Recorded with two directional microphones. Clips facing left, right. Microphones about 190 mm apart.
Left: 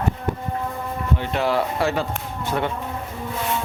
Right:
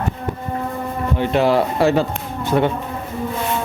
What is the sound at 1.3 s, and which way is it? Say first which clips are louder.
A man's voice: right 6 dB; 25° right (ahead or behind).